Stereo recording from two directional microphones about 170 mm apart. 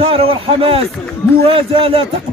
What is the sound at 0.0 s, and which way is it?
A man's voice, 35° right (ahead or behind).